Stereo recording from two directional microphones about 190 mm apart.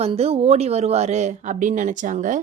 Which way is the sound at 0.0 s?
35° right (ahead or behind).